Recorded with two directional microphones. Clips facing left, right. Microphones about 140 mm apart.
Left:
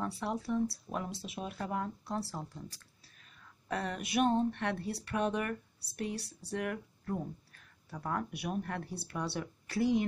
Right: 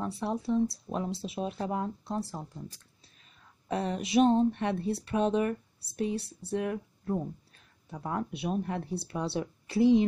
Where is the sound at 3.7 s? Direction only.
25° right (ahead or behind).